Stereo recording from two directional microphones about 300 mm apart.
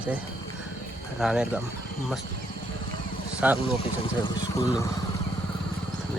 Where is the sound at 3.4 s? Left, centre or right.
Centre.